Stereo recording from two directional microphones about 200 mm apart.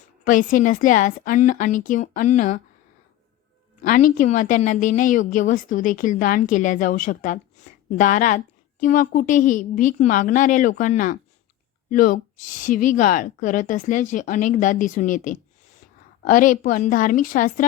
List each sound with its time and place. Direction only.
0.3 s a woman's voice: 40° left (ahead or behind)
3.8 s a woman's voice: 40° left (ahead or behind)